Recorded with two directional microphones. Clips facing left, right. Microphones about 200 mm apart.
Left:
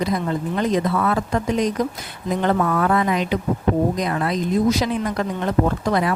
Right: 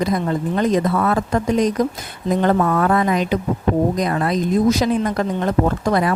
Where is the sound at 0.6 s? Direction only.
45° right (ahead or behind).